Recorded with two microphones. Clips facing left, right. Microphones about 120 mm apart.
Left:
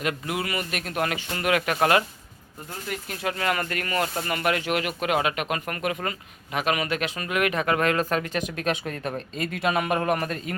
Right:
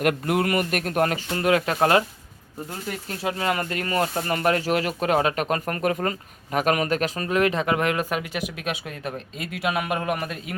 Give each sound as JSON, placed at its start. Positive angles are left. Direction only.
{"t": 0.0, "sound": "speech", "side_deg": -50}
{"t": 1.3, "sound": "speech", "side_deg": -30}
{"t": 3.1, "sound": "speech", "side_deg": -25}